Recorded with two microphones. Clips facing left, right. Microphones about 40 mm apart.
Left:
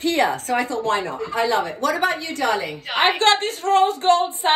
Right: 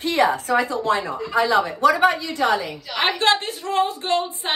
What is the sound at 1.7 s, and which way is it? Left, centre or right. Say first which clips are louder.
Speech: right 5 dB; right.